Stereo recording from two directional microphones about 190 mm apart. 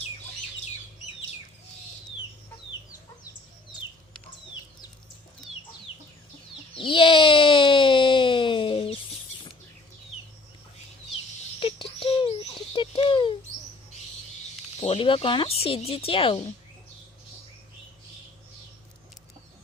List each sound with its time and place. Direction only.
3.2 s chicken: 20° left (ahead or behind)
6.7 s cat: 25° left (ahead or behind)
11.6 s a sound: 30° left (ahead or behind)
14.8 s speech: 30° left (ahead or behind)